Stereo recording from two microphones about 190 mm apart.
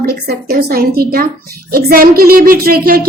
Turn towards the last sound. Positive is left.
turn(degrees=-50)  # may be behind; listen again after turning